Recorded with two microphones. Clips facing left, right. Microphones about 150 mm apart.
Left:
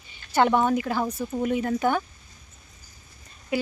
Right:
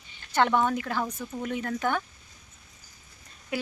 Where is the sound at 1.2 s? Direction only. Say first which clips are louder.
Left 7 dB; 25° left (ahead or behind).